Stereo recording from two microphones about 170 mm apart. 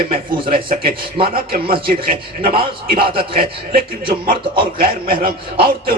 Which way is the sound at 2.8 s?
60° right (ahead or behind).